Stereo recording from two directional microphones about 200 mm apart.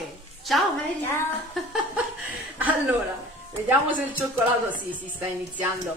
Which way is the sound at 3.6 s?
10° right (ahead or behind).